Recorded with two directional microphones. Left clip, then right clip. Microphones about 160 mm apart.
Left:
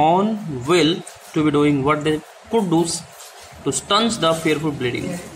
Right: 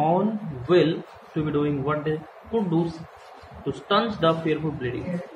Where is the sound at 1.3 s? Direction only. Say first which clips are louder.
Left 8 dB; 40° left (ahead or behind).